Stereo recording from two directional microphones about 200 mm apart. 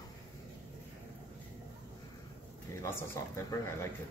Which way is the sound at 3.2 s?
15° left (ahead or behind).